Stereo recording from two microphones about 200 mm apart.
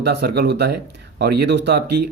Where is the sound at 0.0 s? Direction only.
55° right (ahead or behind).